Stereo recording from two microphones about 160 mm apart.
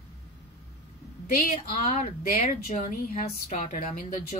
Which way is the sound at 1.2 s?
60° left (ahead or behind).